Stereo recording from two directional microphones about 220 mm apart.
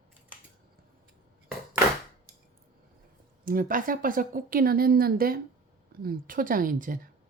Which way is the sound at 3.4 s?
40° right (ahead or behind).